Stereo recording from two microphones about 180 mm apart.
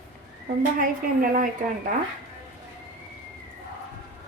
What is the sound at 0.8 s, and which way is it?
Speech, 50° right (ahead or behind).